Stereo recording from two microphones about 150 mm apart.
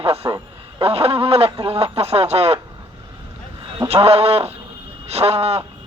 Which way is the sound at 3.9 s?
40° right (ahead or behind).